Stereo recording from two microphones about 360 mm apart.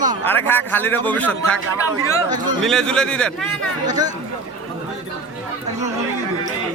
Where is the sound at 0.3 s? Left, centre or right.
Centre.